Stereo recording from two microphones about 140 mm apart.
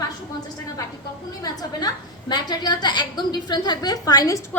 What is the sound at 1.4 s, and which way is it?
A woman's voice, 30° left (ahead or behind).